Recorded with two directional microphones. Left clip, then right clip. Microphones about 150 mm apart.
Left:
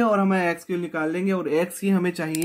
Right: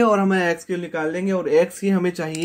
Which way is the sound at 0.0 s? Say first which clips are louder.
Right 3 dB; 20° right (ahead or behind).